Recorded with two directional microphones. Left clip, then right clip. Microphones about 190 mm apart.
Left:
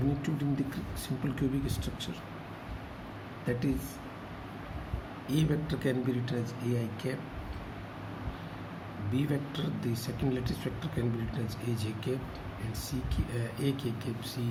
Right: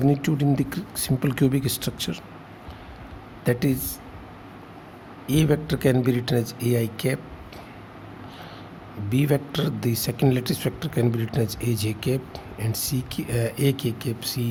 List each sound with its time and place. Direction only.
0.2 s speech: 60° right (ahead or behind)
3.4 s speech: 55° right (ahead or behind)
5.3 s speech: 60° right (ahead or behind)
9.1 s speech: 60° right (ahead or behind)